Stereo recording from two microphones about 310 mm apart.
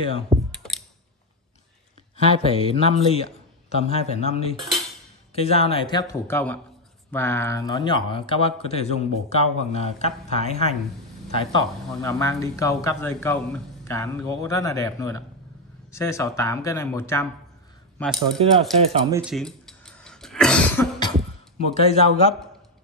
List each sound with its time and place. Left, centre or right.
0.5 s a sound: centre
2.4 s speech: centre
17.9 s coin: centre
18.4 s speech: centre
19.1 s cough: centre
21.7 s speech: centre